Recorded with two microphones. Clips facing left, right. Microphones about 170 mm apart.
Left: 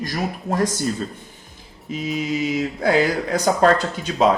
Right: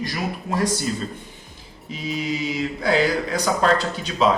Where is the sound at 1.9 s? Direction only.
50° left (ahead or behind).